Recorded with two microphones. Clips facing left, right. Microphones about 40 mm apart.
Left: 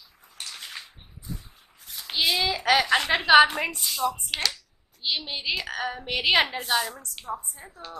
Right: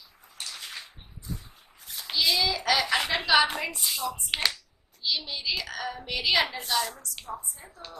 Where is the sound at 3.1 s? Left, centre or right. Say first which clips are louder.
Left 4 dB; left.